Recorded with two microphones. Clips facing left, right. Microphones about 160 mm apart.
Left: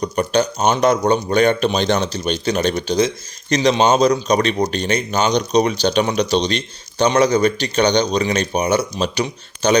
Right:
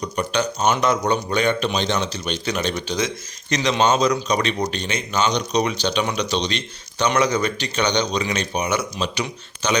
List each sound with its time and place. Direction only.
0.2 s speech: 40° left (ahead or behind)